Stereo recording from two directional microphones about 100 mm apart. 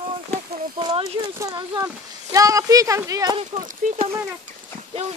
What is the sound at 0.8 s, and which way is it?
Speech, 50° right (ahead or behind).